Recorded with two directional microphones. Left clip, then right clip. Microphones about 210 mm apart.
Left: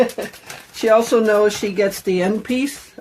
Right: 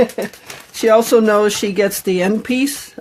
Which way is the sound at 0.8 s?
50° right (ahead or behind).